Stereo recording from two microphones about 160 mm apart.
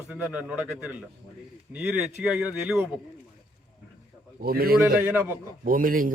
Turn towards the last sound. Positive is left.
turn(degrees=-60)  # may be behind; listen again after turning